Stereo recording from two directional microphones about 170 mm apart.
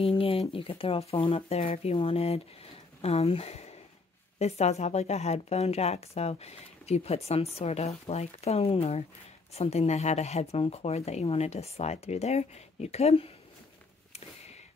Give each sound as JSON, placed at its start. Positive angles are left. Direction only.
{"t": 0.0, "sound": "a woman's voice", "side_deg": 35}